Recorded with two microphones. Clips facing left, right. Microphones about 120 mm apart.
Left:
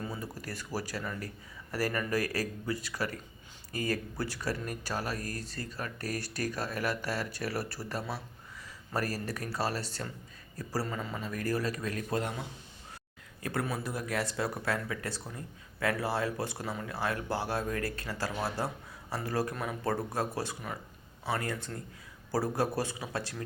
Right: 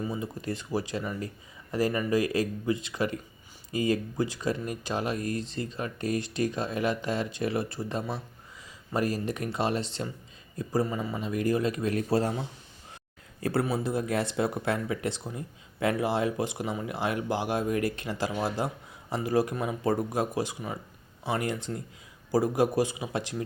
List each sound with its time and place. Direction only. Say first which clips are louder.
0.0 s speech: right 6 dB; 20° right (ahead or behind)